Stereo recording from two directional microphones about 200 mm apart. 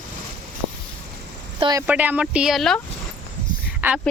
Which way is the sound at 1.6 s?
20° right (ahead or behind).